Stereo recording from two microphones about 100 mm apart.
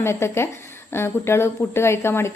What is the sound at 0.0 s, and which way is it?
Speech, 25° left (ahead or behind).